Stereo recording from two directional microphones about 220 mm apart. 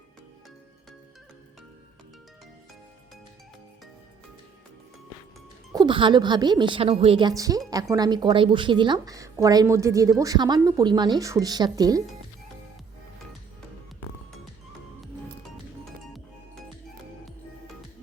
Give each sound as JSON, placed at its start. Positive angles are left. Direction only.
{"t": 5.7, "sound": "a woman's voice", "side_deg": -20}